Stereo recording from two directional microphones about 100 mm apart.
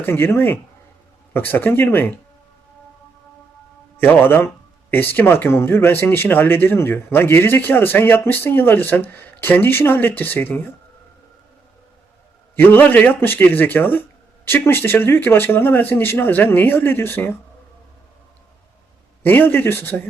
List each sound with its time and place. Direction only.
0.0 s speech: 20° left (ahead or behind)
3.9 s speech: 20° left (ahead or behind)
12.5 s speech: 20° left (ahead or behind)
19.2 s speech: 20° left (ahead or behind)